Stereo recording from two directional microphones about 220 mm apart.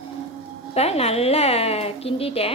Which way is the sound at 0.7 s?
25° left (ahead or behind).